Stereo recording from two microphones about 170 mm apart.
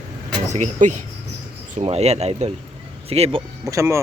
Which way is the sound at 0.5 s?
45° right (ahead or behind).